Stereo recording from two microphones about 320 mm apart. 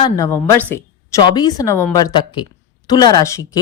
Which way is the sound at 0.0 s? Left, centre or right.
Centre.